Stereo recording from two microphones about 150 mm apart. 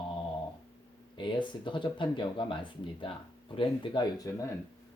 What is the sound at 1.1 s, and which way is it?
Speech, 30° left (ahead or behind).